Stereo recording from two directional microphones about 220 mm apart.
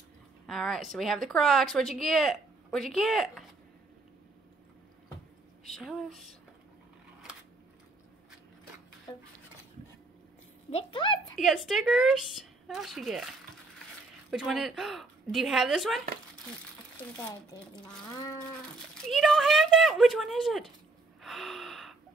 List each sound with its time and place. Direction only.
0.5 s a woman's voice: centre (ahead or behind)
5.7 s a woman's voice: centre (ahead or behind)
9.1 s a sound: 20° left (ahead or behind)
10.7 s a sound: 25° left (ahead or behind)
11.3 s a woman's voice: centre (ahead or behind)
14.3 s a woman's voice: centre (ahead or behind)
17.7 s speech: 20° left (ahead or behind)
19.0 s a woman's voice: centre (ahead or behind)
21.2 s gasp: centre (ahead or behind)